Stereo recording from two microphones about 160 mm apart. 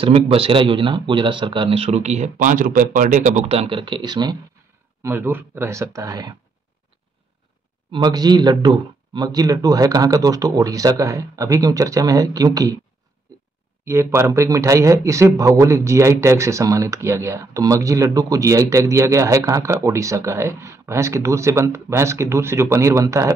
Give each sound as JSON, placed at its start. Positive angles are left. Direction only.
{"t": 0.0, "sound": "speech", "side_deg": -35}
{"t": 5.0, "sound": "speech", "side_deg": -15}
{"t": 7.9, "sound": "speech", "side_deg": -25}
{"t": 13.8, "sound": "speech", "side_deg": -15}